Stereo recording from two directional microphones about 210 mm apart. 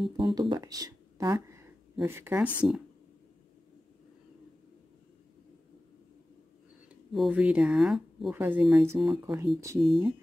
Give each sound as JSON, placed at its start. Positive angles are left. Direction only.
{"t": 0.2, "sound": "speech", "side_deg": -20}
{"t": 7.1, "sound": "speech", "side_deg": -5}